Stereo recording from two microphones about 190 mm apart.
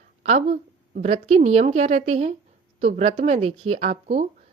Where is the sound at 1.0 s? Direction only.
35° right (ahead or behind).